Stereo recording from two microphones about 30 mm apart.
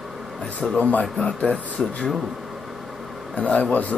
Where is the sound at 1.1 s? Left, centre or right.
Left.